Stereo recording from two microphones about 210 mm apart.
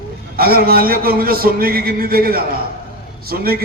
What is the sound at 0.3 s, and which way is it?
A man's voice, 45° right (ahead or behind).